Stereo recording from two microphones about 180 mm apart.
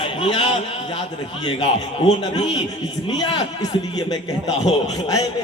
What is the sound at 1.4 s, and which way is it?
Speech, 30° left (ahead or behind).